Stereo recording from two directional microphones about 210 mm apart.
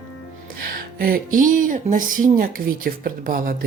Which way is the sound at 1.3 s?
40° right (ahead or behind).